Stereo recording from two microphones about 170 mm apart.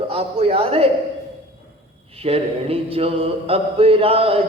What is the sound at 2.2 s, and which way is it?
A man's voice, 35° right (ahead or behind).